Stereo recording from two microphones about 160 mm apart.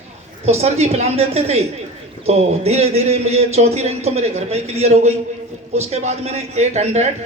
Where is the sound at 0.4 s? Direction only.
40° right (ahead or behind).